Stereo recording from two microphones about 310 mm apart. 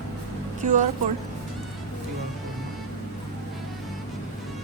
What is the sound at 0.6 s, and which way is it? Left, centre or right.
Speech, right.